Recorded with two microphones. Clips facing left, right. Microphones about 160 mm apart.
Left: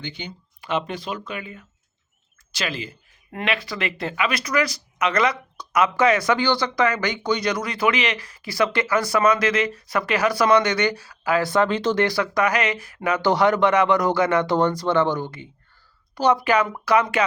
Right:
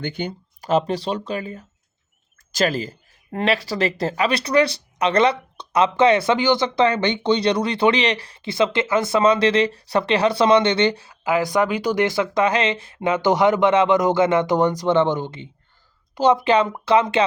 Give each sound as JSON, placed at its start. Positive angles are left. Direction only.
{"t": 0.0, "sound": "speech", "side_deg": -50}